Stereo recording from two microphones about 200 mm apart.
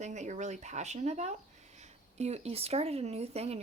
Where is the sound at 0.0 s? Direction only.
35° right (ahead or behind).